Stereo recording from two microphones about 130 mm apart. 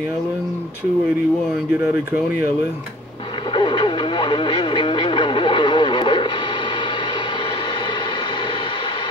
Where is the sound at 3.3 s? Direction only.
40° left (ahead or behind).